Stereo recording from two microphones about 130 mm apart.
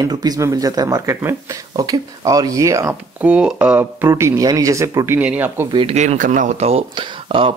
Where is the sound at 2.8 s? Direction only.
10° right (ahead or behind).